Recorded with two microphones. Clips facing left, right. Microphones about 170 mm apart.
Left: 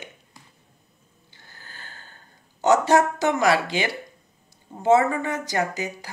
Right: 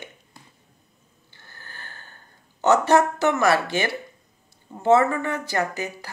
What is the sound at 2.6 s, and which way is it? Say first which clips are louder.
Speech: even; 15° left (ahead or behind).